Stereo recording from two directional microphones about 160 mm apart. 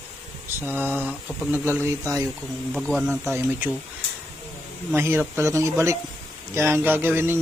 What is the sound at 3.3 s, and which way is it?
Speech, 15° right (ahead or behind).